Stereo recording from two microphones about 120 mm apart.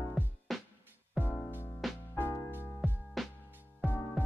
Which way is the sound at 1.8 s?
Centre (ahead or behind).